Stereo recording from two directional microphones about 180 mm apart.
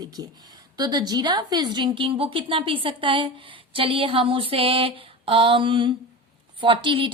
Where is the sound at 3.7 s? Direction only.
30° right (ahead or behind).